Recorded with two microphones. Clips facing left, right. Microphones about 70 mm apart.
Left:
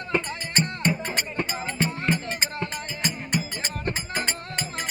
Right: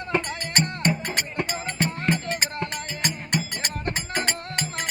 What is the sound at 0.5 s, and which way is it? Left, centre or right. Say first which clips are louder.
Music: right 1 dB; right.